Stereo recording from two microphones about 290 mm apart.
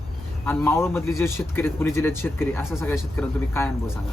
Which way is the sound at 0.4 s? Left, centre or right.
Centre.